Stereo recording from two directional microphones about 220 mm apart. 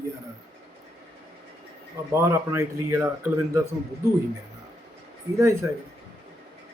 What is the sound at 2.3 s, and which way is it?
Speech, 10° right (ahead or behind).